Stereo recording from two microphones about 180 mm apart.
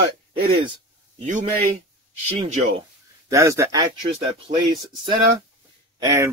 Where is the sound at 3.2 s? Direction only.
15° right (ahead or behind).